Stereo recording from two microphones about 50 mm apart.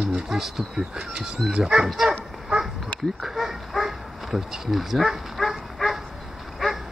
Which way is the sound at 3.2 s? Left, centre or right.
Centre.